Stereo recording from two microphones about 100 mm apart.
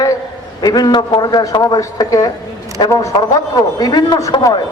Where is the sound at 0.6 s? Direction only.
40° left (ahead or behind).